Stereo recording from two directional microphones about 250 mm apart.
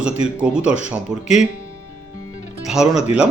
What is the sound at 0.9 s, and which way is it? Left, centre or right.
Speech, centre.